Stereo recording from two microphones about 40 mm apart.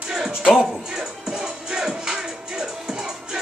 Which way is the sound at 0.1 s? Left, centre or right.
Centre.